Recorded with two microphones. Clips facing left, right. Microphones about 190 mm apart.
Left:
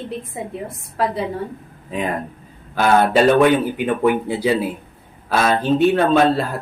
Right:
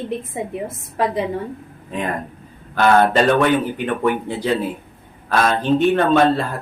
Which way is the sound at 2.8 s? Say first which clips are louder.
Even; 5° left (ahead or behind).